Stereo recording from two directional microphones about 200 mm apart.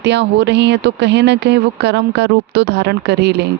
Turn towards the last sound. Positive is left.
turn(degrees=-55)  # may be behind; listen again after turning